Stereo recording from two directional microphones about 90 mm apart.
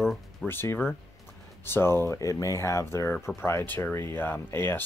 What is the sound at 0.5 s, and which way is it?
Speech, 25° left (ahead or behind).